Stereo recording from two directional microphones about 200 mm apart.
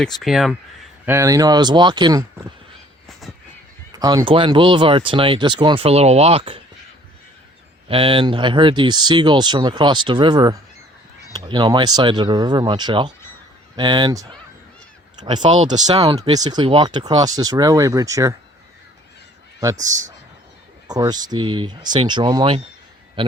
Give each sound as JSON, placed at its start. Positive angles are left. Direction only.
{"t": 0.2, "sound": "speech", "side_deg": 0}
{"t": 1.0, "sound": "speech", "side_deg": -15}
{"t": 3.9, "sound": "speech", "side_deg": -20}
{"t": 7.9, "sound": "speech", "side_deg": -25}
{"t": 15.9, "sound": "speech", "side_deg": -20}
{"t": 19.7, "sound": "speech", "side_deg": -40}
{"t": 20.8, "sound": "speech", "side_deg": -20}